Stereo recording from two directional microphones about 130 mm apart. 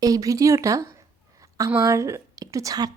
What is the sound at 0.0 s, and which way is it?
A woman's voice, 25° right (ahead or behind).